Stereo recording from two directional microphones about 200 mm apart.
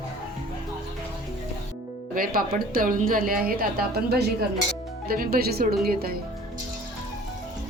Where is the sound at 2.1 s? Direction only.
45° right (ahead or behind).